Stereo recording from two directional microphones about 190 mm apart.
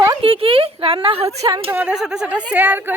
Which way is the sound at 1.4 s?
20° right (ahead or behind).